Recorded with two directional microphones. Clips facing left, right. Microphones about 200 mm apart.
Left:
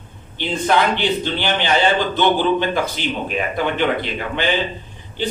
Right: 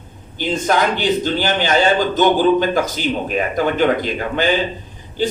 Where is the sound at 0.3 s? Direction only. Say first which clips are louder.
Right 1 dB; 45° right (ahead or behind).